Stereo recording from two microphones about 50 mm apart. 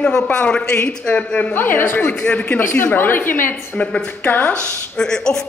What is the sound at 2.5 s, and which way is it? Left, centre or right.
A woman's voice, left.